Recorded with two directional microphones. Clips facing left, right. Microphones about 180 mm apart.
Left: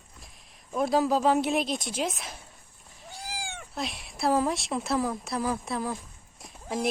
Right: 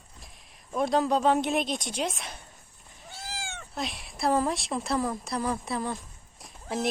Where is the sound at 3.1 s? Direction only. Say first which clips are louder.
Left 1 dB; 15° left (ahead or behind).